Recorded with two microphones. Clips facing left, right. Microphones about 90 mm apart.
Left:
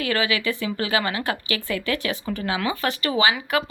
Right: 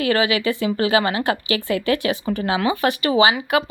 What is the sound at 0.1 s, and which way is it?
Speech, 25° right (ahead or behind).